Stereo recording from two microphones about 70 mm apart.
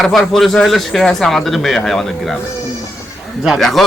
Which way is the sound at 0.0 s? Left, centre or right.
Centre.